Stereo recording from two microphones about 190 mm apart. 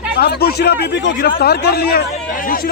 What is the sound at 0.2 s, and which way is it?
Speech, 55° left (ahead or behind).